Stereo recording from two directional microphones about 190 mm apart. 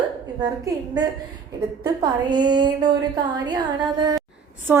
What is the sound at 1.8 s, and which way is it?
A woman's voice, 20° right (ahead or behind).